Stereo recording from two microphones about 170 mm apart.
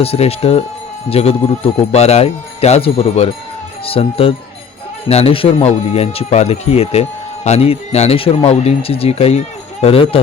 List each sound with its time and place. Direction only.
0.0 s speech: 35° left (ahead or behind)